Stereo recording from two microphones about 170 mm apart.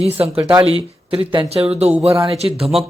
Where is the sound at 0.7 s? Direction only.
35° right (ahead or behind).